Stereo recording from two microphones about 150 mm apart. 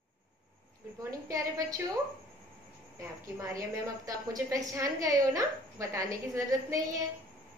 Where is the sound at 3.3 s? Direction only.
20° right (ahead or behind).